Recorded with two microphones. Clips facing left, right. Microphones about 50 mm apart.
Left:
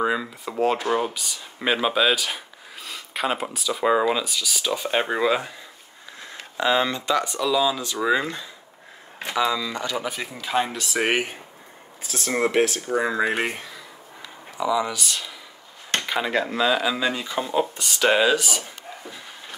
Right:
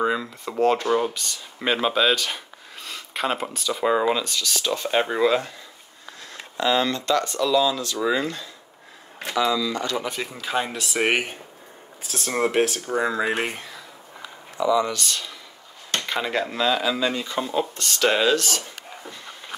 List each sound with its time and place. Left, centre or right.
0.0 s speech: centre; by 9.9 s left
9.9 s speech: centre
12.4 s speech: centre
12.9 s speech: centre
14.6 s speech: centre